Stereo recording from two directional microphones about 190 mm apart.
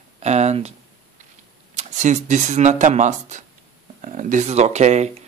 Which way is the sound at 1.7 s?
40° right (ahead or behind).